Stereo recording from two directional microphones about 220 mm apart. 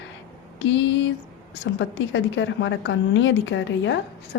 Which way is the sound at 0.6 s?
55° left (ahead or behind).